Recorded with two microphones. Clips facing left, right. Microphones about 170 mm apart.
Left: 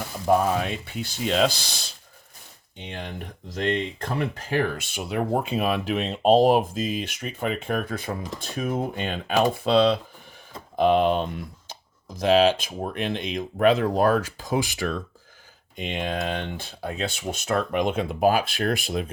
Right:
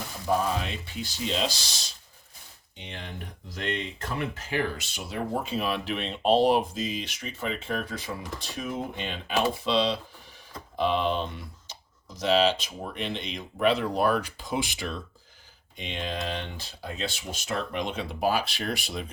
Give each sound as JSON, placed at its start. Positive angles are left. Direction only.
{"t": 0.3, "sound": "speech", "side_deg": 55}
{"t": 4.2, "sound": "speech", "side_deg": 45}